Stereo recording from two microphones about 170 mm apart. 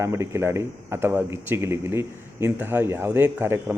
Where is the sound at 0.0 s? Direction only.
15° right (ahead or behind).